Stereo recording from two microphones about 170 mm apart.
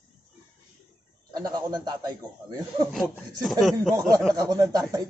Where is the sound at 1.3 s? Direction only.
25° right (ahead or behind).